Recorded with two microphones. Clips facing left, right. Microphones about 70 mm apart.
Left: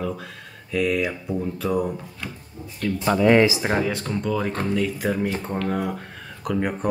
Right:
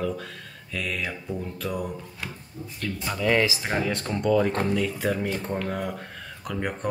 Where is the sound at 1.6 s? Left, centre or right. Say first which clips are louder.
Left 7 dB; centre.